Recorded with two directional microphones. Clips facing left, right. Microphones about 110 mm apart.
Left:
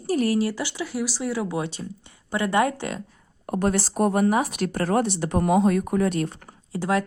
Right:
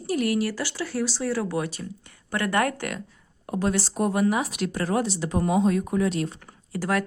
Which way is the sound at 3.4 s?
50° left (ahead or behind).